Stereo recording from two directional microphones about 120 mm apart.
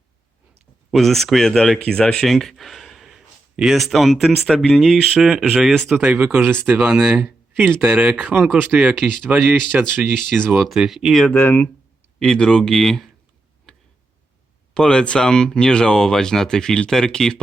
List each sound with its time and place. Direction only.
0.9 s speech: centre (ahead or behind); by 6.7 s 15° right (ahead or behind)
6.7 s speech: 5° right (ahead or behind)
9.0 s speech: 5° left (ahead or behind)
9.7 s speech: 10° right (ahead or behind)
10.6 s speech: centre (ahead or behind)
11.3 s speech: 15° left (ahead or behind)
12.2 s speech: 5° left (ahead or behind)
14.7 s speech: 5° left (ahead or behind)